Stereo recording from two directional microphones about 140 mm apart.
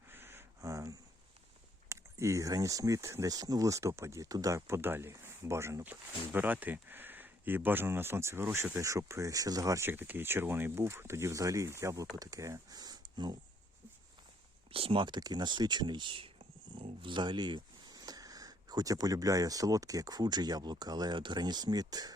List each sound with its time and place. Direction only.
0.1 s a sound: 15° right (ahead or behind)
1.9 s speech: 20° right (ahead or behind)
14.7 s speech: 40° right (ahead or behind)